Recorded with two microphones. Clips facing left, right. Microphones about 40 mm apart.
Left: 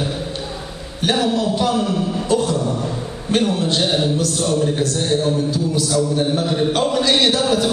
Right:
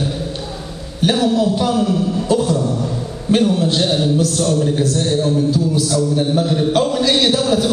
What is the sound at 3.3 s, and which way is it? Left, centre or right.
Mantra, centre.